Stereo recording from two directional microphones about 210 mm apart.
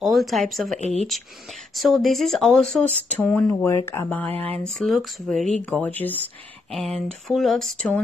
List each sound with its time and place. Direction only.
0.0 s speech: centre (ahead or behind)
0.7 s speech: 30° left (ahead or behind)
1.8 s speech: centre (ahead or behind)
7.2 s speech: centre (ahead or behind)